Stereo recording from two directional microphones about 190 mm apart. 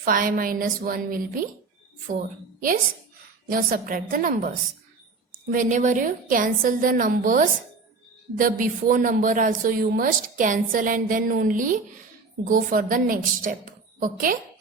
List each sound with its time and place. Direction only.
0.0 s speech: 45° right (ahead or behind)